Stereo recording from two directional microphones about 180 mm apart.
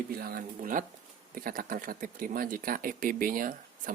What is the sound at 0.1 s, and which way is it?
Speech, 55° right (ahead or behind).